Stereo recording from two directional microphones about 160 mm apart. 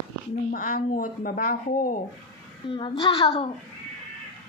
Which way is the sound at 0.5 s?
65° left (ahead or behind).